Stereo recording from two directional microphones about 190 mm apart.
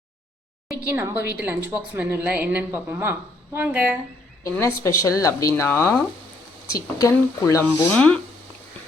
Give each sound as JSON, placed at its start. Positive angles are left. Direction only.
{"t": 0.9, "sound": "a woman's voice", "side_deg": -15}
{"t": 4.6, "sound": "speech", "side_deg": 15}
{"t": 7.9, "sound": "speech", "side_deg": 5}